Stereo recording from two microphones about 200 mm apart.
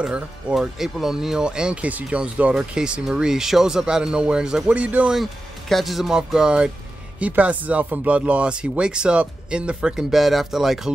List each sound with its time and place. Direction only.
0.0 s speech: 5° right (ahead or behind)